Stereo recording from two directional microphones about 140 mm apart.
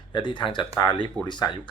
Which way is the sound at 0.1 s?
35° left (ahead or behind).